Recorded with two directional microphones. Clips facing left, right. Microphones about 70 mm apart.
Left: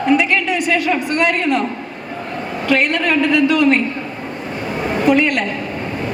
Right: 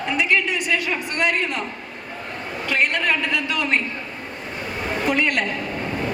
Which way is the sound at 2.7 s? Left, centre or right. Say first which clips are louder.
Left 5 dB; left.